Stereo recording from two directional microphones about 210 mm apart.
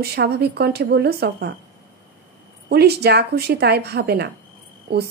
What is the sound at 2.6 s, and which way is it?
A woman's voice, 50° right (ahead or behind).